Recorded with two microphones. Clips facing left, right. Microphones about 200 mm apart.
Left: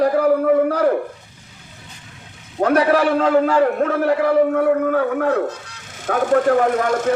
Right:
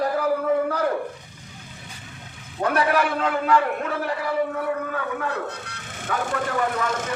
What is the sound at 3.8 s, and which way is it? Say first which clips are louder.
A man's voice: left 10 dB; 55° left (ahead or behind).